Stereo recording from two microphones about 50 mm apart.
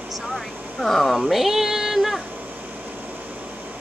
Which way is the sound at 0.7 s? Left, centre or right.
Centre.